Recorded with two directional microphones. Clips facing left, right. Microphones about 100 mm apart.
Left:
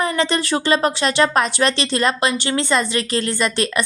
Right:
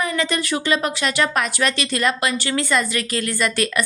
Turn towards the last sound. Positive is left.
turn(degrees=25)  # may be behind; listen again after turning